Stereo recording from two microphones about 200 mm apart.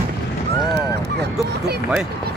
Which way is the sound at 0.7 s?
55° right (ahead or behind).